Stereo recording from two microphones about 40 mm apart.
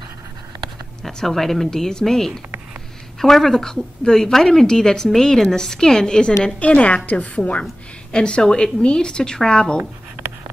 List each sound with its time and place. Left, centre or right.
1.0 s a woman's voice: centre
6.6 s a woman's voice: left
8.1 s a woman's voice: left